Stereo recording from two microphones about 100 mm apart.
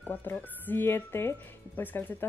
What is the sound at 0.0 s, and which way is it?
Speech, 20° left (ahead or behind).